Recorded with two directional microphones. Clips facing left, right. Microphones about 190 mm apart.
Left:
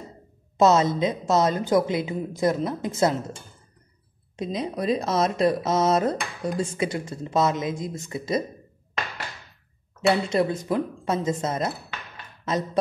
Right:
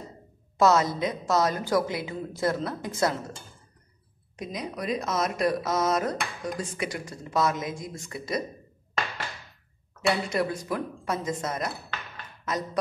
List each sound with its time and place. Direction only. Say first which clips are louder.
0.6 s speech: left 3 dB; 25° left (ahead or behind)
4.4 s speech: left 6 dB; 25° left (ahead or behind)
10.0 s speech: left 5 dB; 25° left (ahead or behind)